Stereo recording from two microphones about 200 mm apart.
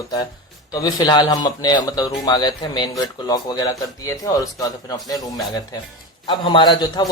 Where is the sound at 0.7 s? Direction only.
20° left (ahead or behind).